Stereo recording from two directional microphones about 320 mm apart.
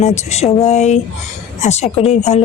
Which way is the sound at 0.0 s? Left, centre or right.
Left.